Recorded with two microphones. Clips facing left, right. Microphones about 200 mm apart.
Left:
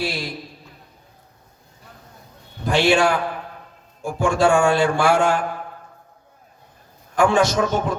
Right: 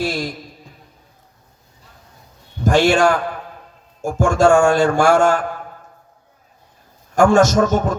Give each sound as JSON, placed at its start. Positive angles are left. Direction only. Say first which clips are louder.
{"t": 0.0, "sound": "a sound", "louder": "right 4 dB", "side_deg": -45}
{"t": 2.6, "sound": "a man's voice", "louder": "right 3 dB", "side_deg": -45}
{"t": 7.2, "sound": "a man's voice", "louder": "right 5 dB", "side_deg": -45}